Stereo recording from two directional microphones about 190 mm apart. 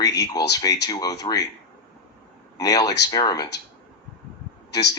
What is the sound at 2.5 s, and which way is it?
Speech, 20° left (ahead or behind).